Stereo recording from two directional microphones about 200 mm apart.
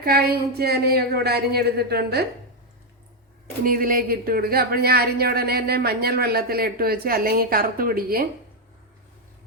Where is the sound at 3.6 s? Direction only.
45° right (ahead or behind).